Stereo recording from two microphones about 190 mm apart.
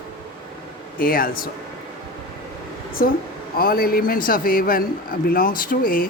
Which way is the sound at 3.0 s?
50° left (ahead or behind).